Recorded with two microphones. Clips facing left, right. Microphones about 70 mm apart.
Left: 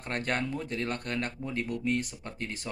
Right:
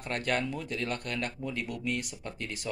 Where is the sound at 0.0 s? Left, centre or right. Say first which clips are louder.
Right 1 dB; left.